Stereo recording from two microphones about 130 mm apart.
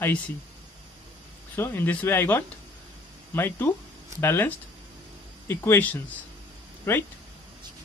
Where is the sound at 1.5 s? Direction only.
15° left (ahead or behind).